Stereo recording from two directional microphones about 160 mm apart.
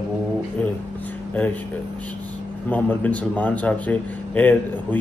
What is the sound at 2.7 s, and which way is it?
Speech, 10° left (ahead or behind).